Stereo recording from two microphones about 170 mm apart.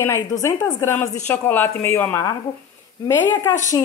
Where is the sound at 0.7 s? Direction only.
15° left (ahead or behind).